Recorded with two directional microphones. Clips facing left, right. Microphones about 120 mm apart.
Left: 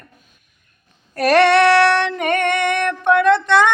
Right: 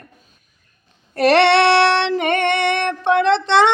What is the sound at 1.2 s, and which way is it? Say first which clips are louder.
Female singing: even; 30° right (ahead or behind).